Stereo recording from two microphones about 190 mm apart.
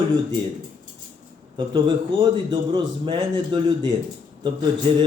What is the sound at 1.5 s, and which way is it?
Speech, 25° right (ahead or behind).